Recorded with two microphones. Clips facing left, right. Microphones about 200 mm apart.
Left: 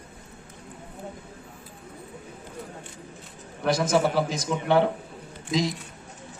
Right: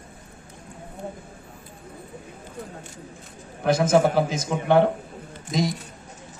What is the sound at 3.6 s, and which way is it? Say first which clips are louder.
A man's voice: right 4 dB; 50° right (ahead or behind).